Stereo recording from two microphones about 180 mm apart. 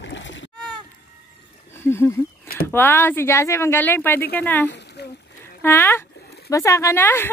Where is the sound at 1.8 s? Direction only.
15° left (ahead or behind).